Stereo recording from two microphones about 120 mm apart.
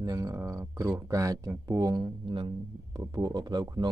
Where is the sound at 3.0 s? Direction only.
30° right (ahead or behind).